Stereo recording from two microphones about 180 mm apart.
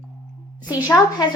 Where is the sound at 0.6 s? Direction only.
10° right (ahead or behind).